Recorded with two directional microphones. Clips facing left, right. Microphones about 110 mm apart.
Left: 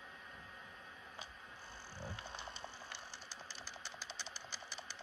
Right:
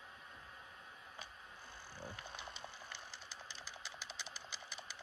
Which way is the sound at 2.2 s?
35° left (ahead or behind).